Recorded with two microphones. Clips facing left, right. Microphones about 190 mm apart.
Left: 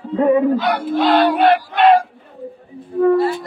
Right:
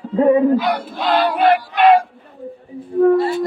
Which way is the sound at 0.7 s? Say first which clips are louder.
Left 3 dB; 60° left (ahead or behind).